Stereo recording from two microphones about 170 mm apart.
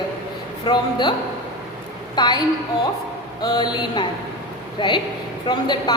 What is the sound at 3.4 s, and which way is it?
A woman's voice, 25° left (ahead or behind).